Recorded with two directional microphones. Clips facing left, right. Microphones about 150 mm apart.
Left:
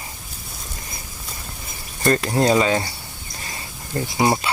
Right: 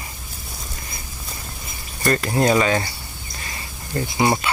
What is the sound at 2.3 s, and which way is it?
Speech, 30° left (ahead or behind).